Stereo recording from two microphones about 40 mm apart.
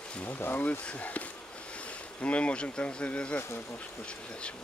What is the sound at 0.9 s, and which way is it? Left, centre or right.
Speech, left.